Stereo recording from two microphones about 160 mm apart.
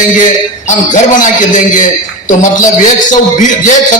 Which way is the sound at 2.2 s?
55° left (ahead or behind).